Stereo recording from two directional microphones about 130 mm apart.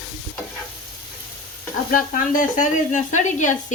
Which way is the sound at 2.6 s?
70° left (ahead or behind).